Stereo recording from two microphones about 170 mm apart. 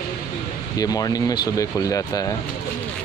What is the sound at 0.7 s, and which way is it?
Speech, 20° left (ahead or behind).